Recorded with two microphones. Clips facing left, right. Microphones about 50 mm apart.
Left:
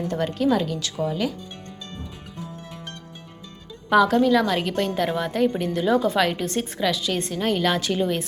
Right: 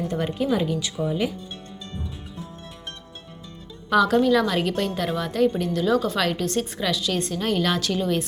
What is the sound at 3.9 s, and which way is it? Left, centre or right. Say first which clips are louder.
Speech: left 2 dB; centre.